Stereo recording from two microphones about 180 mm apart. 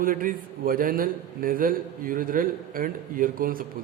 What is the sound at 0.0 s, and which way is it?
A man's voice, 50° right (ahead or behind).